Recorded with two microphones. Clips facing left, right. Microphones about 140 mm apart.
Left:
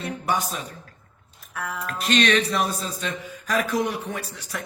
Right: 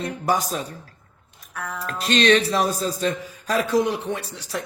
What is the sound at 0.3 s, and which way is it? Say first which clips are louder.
Speech: right 4 dB; 35° right (ahead or behind).